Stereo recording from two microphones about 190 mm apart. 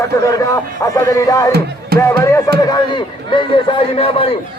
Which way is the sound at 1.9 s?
55° right (ahead or behind).